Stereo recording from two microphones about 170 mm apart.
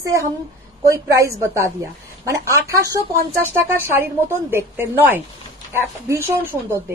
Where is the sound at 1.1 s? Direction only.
15° right (ahead or behind).